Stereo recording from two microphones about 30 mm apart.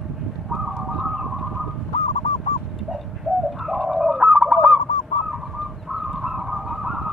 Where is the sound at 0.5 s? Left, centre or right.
Centre.